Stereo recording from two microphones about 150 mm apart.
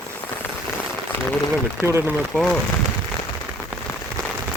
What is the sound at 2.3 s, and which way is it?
Speech, 10° left (ahead or behind).